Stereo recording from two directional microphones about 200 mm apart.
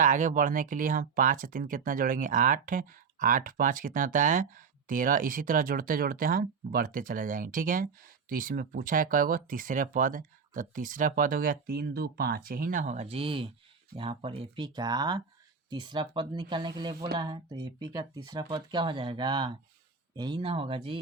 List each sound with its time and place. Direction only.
0.0 s speech: 40° right (ahead or behind)